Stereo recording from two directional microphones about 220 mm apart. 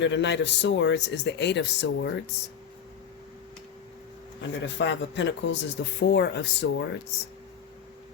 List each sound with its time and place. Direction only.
0.0 s speech: 55° left (ahead or behind)
4.4 s speech: 55° left (ahead or behind)